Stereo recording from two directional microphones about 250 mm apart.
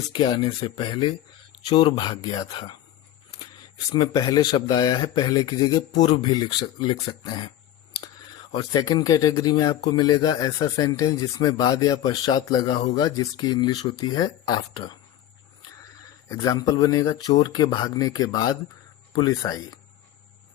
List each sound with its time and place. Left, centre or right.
0.1 s speech: centre
3.9 s speech: centre
8.5 s speech: centre
16.3 s speech: centre